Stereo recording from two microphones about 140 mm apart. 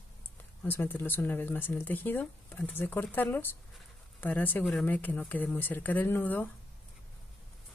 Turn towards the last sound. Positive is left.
turn(degrees=15)  # may be behind; listen again after turning